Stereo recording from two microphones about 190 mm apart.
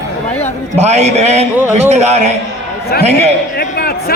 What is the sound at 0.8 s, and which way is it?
A man's voice, 35° right (ahead or behind).